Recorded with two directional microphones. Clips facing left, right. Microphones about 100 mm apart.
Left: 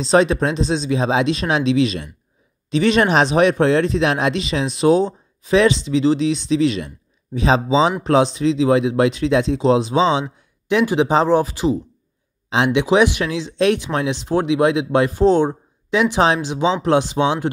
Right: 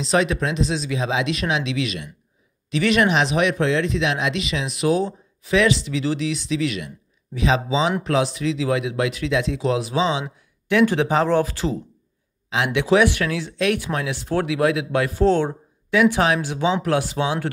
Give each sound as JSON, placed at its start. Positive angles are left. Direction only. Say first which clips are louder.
{"t": 0.0, "sound": "speech", "louder": "left 5 dB", "side_deg": 35}
{"t": 10.2, "sound": "speech", "louder": "left 3 dB", "side_deg": 20}
{"t": 12.4, "sound": "speech", "louder": "left 3 dB", "side_deg": 25}